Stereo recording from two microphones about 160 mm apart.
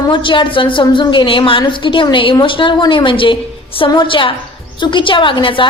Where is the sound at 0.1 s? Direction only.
30° left (ahead or behind).